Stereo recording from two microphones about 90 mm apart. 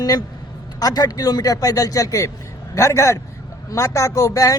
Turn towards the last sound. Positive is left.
turn(degrees=40)  # may be behind; listen again after turning